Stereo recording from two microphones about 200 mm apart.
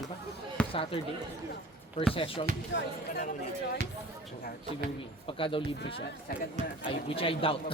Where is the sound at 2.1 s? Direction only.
25° left (ahead or behind).